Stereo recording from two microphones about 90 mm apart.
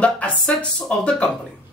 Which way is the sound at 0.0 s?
15° left (ahead or behind).